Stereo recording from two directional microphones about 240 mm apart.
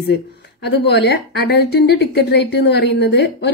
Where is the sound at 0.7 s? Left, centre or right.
Left.